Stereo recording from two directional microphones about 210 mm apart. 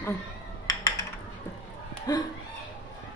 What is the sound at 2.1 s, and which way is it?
Speech, 20° left (ahead or behind).